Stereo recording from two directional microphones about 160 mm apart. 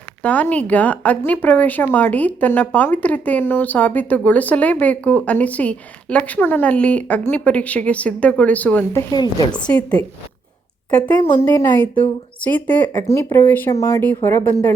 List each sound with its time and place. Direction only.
0.2 s speech: 10° left (ahead or behind); by 9.6 s 25° left (ahead or behind)
9.6 s speech: 10° left (ahead or behind)